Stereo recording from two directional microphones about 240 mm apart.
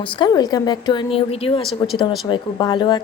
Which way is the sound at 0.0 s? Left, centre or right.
Centre.